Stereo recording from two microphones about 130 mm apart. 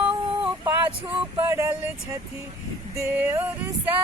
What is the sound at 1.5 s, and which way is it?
Speech, 20° right (ahead or behind).